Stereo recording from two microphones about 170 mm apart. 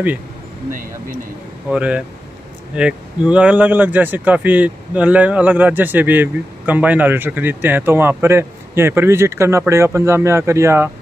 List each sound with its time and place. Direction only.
0.7 s speech: 50° right (ahead or behind)
1.7 s speech: 5° right (ahead or behind)